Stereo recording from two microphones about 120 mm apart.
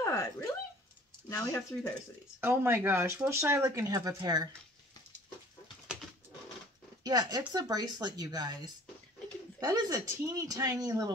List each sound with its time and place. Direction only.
0.0 s speech: 25° left (ahead or behind)
2.4 s speech: 20° right (ahead or behind); by 4.5 s 35° right (ahead or behind)
7.0 s speech: 35° right (ahead or behind)